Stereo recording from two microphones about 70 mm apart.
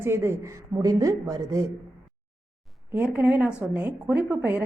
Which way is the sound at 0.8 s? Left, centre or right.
Right.